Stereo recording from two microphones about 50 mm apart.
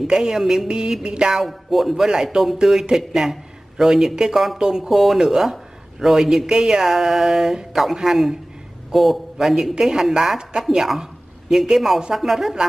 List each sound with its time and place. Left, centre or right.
0.0 s speech: centre
1.4 s speech: centre